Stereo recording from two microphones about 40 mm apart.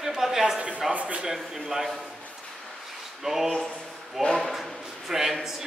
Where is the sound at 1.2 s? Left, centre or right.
Centre.